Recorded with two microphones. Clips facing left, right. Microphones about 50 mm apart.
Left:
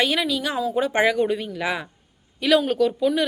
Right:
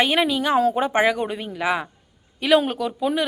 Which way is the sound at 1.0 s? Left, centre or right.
Centre.